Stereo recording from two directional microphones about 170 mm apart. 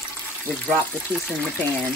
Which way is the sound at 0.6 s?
5° left (ahead or behind).